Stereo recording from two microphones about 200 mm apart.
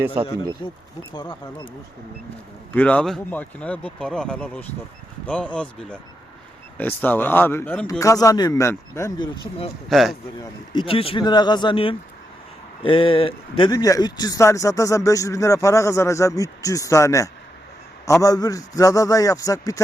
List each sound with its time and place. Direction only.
0.6 s speech: 25° left (ahead or behind)
2.7 s speech: 5° left (ahead or behind); by 9.6 s 20° left (ahead or behind)
9.9 s speech: centre (ahead or behind)
10.7 s speech: 25° left (ahead or behind)